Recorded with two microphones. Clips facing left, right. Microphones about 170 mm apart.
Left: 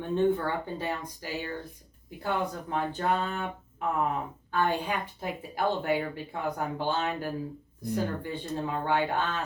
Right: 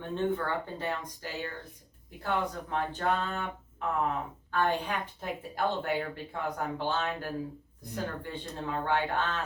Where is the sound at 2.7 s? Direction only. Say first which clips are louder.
Left 2 dB; 10° left (ahead or behind).